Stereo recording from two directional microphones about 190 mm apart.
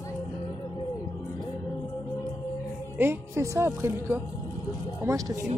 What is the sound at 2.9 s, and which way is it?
Speech, 10° right (ahead or behind).